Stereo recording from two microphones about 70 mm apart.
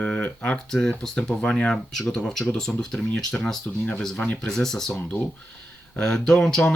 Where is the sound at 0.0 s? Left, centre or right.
Centre.